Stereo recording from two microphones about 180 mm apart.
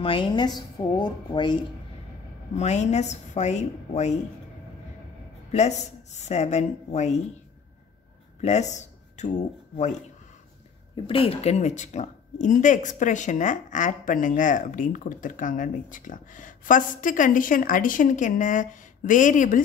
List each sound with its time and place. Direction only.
0.0 s speech: 30° left (ahead or behind)
2.5 s speech: 40° left (ahead or behind)
5.5 s speech: 40° left (ahead or behind)
8.4 s speech: 40° left (ahead or behind)
11.1 s speech: 30° left (ahead or behind)